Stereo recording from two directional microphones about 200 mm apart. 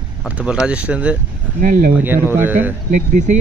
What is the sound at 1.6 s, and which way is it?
Speech, 40° right (ahead or behind).